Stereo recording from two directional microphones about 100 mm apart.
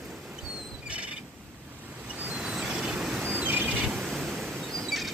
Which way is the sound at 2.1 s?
15° right (ahead or behind).